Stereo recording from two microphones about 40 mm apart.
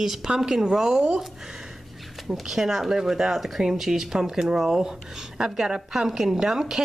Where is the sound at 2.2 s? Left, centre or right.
Centre.